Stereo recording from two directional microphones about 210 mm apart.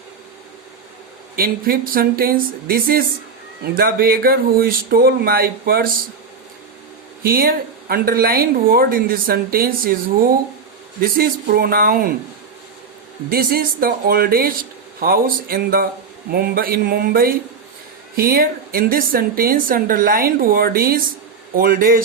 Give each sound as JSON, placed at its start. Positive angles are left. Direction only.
{"t": 1.4, "sound": "speech", "side_deg": -45}
{"t": 7.2, "sound": "speech", "side_deg": -45}
{"t": 11.0, "sound": "speech", "side_deg": -45}
{"t": 13.3, "sound": "speech", "side_deg": -45}